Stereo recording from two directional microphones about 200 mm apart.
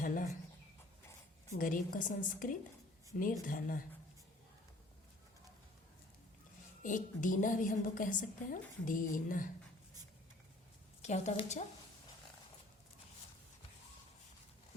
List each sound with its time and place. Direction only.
0.0 s a sound: 45° left (ahead or behind)
1.5 s a woman's voice: 40° left (ahead or behind)
6.8 s a woman's voice: 40° left (ahead or behind)
11.0 s a woman's voice: 35° left (ahead or behind)